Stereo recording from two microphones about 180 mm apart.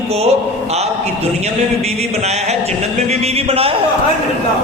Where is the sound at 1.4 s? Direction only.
35° right (ahead or behind).